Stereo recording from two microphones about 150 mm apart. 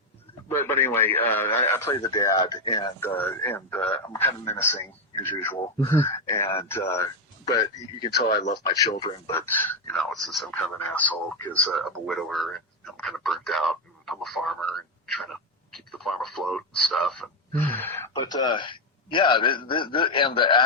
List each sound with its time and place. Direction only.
0.4 s a man's voice: 15° left (ahead or behind)
3.2 s a man's voice: 15° left (ahead or behind)
8.6 s a man's voice: 25° left (ahead or behind)
9.8 s speech: 5° left (ahead or behind)
18.1 s a man's voice: 25° left (ahead or behind)